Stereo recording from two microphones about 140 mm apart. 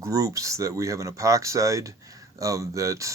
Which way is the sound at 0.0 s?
20° right (ahead or behind).